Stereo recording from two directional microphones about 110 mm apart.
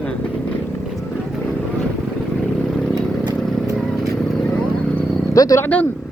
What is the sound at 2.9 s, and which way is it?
Vehicle, 35° right (ahead or behind).